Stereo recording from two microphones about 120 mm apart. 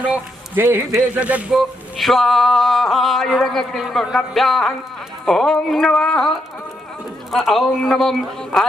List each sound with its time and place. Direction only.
0.0 s a man's voice: 15° right (ahead or behind)
1.5 s male singing: centre (ahead or behind)